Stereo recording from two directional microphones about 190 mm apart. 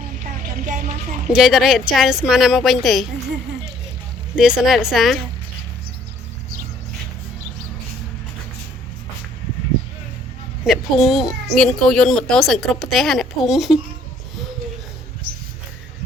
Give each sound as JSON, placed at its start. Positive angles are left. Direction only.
{"t": 0.6, "sound": "a sound", "side_deg": -40}
{"t": 1.3, "sound": "speech", "side_deg": 0}
{"t": 4.4, "sound": "speech", "side_deg": -5}
{"t": 10.7, "sound": "speech", "side_deg": 0}